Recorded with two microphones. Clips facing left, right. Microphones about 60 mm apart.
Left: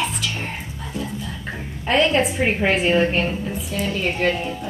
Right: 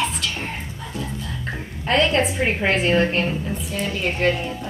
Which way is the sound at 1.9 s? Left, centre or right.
Centre.